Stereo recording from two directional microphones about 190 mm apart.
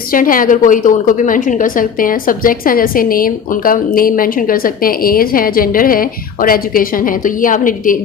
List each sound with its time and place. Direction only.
0.1 s a woman's voice: 45° left (ahead or behind)